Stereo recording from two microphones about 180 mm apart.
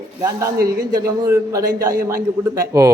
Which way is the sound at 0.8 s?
20° right (ahead or behind).